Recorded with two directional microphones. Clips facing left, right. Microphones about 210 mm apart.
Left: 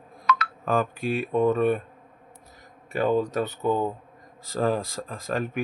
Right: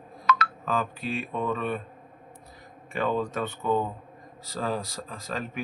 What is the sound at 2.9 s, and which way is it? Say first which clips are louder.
Speech: left 4 dB; 40° left (ahead or behind).